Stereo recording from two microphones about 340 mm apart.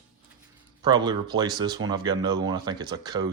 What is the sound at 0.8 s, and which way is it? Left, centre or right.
Speech, centre.